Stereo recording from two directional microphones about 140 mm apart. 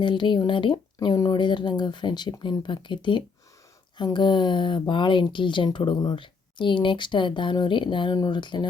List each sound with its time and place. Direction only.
0.0 s speech: 35° left (ahead or behind)